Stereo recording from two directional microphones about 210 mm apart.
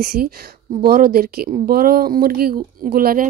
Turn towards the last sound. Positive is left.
turn(degrees=-45)  # may be behind; listen again after turning